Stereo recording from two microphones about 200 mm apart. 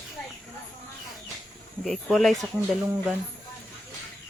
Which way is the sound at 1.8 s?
Centre (ahead or behind).